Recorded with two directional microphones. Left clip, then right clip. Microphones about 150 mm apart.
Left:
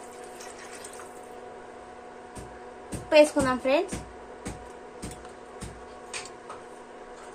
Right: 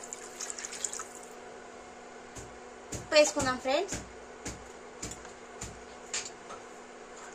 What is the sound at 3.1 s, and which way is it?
Speech, 25° left (ahead or behind).